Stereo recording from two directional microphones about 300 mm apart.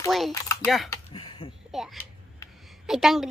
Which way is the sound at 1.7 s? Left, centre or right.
Centre.